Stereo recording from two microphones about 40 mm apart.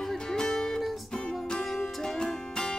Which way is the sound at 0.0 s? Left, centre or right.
Centre.